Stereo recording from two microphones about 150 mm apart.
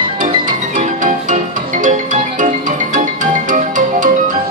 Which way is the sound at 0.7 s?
60° right (ahead or behind).